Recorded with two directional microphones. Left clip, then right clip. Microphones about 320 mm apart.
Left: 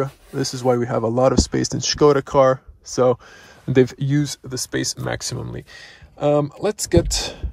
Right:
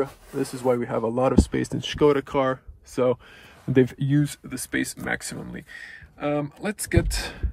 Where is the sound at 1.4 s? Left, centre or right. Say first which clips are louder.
Left 3 dB; centre.